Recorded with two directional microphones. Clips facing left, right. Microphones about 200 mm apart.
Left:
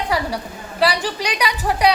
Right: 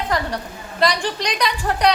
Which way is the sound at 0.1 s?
10° left (ahead or behind).